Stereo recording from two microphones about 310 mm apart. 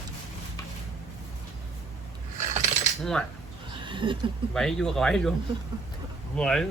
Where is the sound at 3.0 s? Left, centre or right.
Centre.